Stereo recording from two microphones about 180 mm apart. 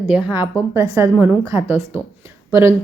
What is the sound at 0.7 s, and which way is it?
A woman's voice, 15° right (ahead or behind).